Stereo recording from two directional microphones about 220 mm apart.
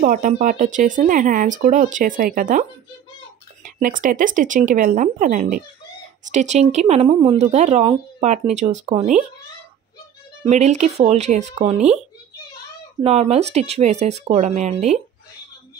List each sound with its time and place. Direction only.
0.0 s speech: 35° right (ahead or behind)
3.6 s speech: 35° right (ahead or behind)
10.5 s speech: 30° right (ahead or behind)
13.0 s speech: 30° right (ahead or behind)